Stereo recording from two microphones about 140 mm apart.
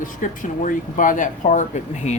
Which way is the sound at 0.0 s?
70° left (ahead or behind).